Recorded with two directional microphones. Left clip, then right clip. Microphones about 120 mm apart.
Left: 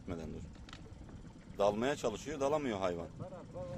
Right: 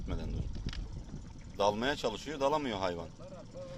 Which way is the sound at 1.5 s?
Centre (ahead or behind).